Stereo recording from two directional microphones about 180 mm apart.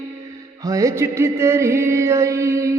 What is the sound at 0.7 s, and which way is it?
Music, 15° right (ahead or behind).